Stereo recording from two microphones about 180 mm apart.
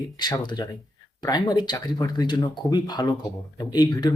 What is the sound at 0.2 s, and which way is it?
Speech, 25° left (ahead or behind).